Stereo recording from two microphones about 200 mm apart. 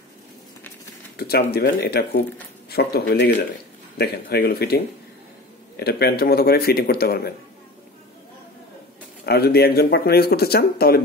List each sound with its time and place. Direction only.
1.1 s speech: 50° left (ahead or behind)
9.2 s speech: 50° left (ahead or behind)